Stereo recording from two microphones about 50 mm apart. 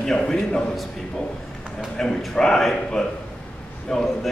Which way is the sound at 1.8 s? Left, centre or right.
Centre.